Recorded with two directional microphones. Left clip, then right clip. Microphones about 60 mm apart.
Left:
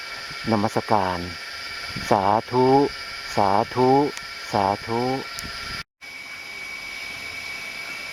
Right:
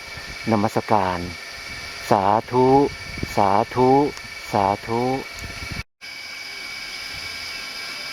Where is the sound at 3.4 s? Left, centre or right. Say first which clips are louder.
Right 2 dB; centre.